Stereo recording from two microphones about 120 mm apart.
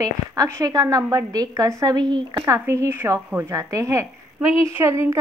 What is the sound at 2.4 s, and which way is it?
A woman's voice, 25° right (ahead or behind).